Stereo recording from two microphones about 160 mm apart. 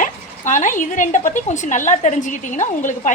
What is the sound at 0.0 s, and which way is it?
A woman's voice, 50° left (ahead or behind).